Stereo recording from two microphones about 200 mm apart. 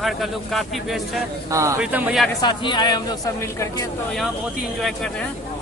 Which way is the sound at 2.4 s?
25° left (ahead or behind).